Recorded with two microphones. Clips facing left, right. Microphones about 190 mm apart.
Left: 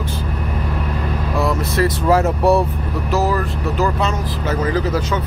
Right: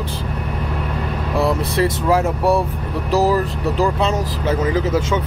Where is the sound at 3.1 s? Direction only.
35° right (ahead or behind).